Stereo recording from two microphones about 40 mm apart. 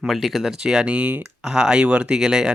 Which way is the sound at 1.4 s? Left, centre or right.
Right.